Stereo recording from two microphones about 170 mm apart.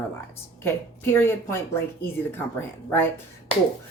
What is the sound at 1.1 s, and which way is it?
Speech, 15° left (ahead or behind).